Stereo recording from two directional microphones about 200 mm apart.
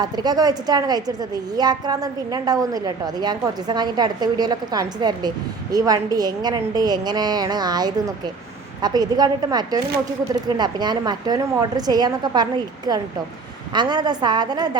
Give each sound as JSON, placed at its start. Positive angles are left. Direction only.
{"t": 0.0, "sound": "a woman's voice", "side_deg": -20}